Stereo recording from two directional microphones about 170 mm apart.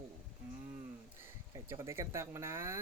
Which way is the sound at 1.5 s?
15° right (ahead or behind).